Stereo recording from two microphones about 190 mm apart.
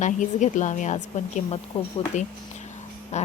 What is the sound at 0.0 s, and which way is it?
A woman's voice, 40° left (ahead or behind).